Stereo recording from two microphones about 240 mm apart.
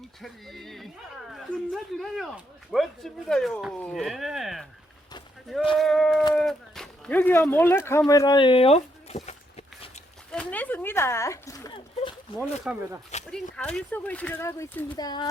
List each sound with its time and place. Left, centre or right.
0.2 s speech: centre
5.7 s speech: centre; by 10.0 s left
10.3 s a sound: centre
12.7 s speech: centre
13.1 s speech: left
13.7 s speech: centre